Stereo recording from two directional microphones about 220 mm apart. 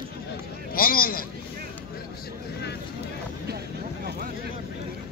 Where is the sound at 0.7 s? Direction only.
40° left (ahead or behind).